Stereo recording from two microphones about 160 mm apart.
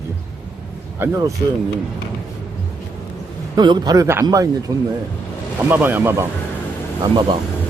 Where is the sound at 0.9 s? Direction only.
15° right (ahead or behind).